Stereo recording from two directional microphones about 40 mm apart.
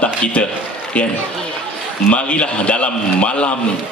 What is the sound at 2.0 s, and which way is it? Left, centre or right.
A man's voice, left.